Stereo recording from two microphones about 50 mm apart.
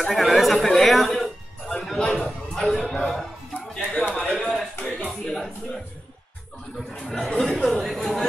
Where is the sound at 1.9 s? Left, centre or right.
Centre.